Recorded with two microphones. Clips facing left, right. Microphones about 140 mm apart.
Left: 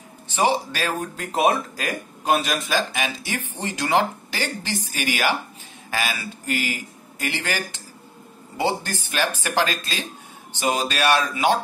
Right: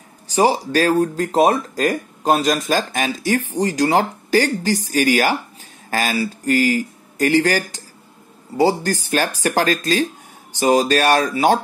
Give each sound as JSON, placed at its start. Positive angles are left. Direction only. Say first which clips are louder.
{"t": 0.3, "sound": "speech", "louder": "right 5 dB", "side_deg": -35}